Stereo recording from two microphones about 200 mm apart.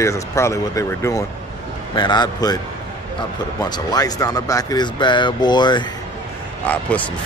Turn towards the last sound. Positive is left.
turn(degrees=5)  # may be behind; listen again after turning